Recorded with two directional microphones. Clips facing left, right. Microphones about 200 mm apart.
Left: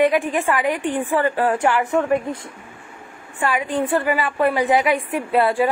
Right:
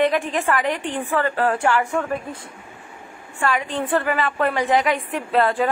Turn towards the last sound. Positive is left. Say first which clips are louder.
# left 2 dB
turn(degrees=10)  # may be behind; listen again after turning